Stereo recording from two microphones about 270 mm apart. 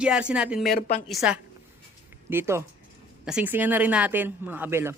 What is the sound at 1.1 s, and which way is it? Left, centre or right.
Speech, centre.